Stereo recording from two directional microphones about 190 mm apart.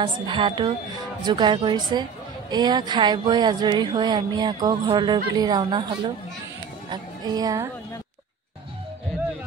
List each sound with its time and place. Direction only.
0.0 s speech: 25° right (ahead or behind)
6.9 s a woman's voice: 20° right (ahead or behind)